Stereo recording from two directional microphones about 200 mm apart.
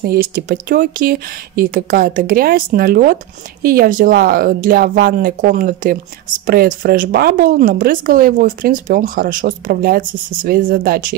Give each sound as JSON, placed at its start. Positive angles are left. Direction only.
{"t": 0.0, "sound": "speech", "side_deg": -50}